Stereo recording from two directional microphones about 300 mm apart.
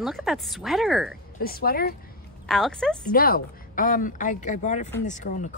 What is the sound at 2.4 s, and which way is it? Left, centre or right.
Speech, centre.